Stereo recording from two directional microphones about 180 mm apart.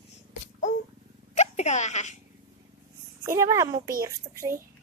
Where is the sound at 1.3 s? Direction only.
40° left (ahead or behind).